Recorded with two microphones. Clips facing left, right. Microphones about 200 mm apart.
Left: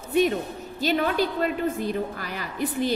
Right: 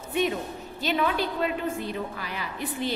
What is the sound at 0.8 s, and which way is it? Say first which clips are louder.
A woman's voice: left 3 dB; 40° left (ahead or behind).